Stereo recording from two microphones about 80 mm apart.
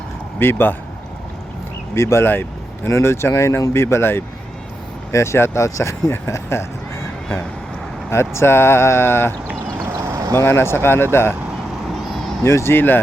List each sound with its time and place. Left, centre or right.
0.3 s speech: left
2.0 s speech: left
8.1 s speech: left
10.4 s speech: left
12.0 s vehicle: centre
12.4 s speech: left